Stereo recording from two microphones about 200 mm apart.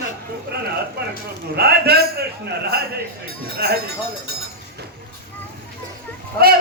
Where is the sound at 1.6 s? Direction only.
50° right (ahead or behind).